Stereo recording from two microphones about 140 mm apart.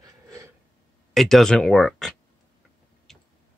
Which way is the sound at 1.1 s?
Centre (ahead or behind).